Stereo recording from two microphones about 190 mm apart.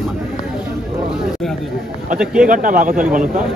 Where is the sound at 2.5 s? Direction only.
45° right (ahead or behind).